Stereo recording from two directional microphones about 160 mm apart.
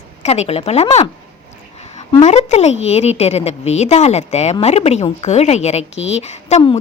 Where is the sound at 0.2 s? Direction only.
40° left (ahead or behind).